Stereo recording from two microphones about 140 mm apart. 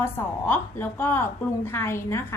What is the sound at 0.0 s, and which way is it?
A woman's voice, 15° left (ahead or behind).